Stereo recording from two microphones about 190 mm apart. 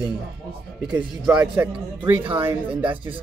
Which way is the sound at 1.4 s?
10° right (ahead or behind).